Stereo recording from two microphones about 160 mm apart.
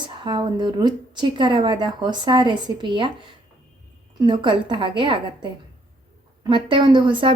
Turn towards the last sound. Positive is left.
turn(degrees=-30)  # may be behind; listen again after turning